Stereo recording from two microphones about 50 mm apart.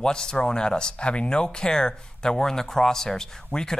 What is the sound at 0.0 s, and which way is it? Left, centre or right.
Speech, centre.